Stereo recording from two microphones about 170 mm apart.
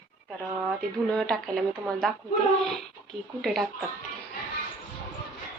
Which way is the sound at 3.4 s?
Centre (ahead or behind).